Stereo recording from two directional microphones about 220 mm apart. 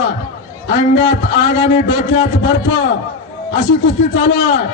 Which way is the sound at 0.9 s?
55° left (ahead or behind).